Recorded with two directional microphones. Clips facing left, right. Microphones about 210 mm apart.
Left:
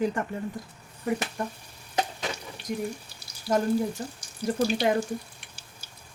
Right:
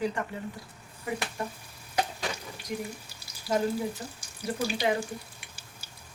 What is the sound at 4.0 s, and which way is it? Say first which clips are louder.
Speech: left 5 dB; 40° left (ahead or behind).